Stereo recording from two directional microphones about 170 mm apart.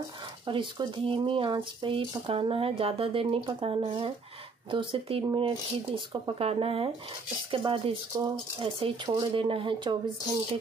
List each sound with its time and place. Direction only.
0.5 s speech: 30° right (ahead or behind)